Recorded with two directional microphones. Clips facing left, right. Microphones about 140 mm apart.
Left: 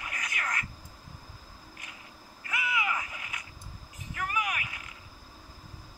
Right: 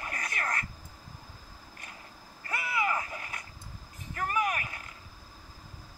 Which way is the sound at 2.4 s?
35° right (ahead or behind).